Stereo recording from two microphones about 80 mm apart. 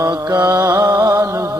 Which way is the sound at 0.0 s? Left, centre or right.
Right.